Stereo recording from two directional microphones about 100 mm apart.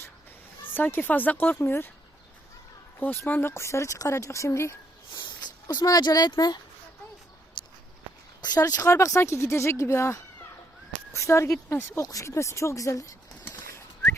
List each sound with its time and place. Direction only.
0.7 s speech: 20° left (ahead or behind)
3.0 s speech: 20° left (ahead or behind)
5.1 s a sound: 50° left (ahead or behind)
5.6 s speech: 35° left (ahead or behind)
7.6 s a sound: 50° left (ahead or behind)
8.4 s speech: 40° left (ahead or behind)
13.4 s bird: 20° left (ahead or behind)